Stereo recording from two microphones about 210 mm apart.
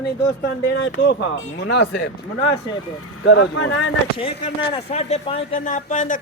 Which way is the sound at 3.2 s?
65° left (ahead or behind).